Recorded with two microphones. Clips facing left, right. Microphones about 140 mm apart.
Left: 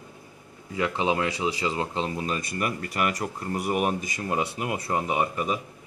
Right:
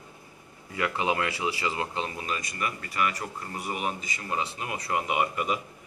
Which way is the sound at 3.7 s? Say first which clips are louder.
Left 6 dB; 50° left (ahead or behind).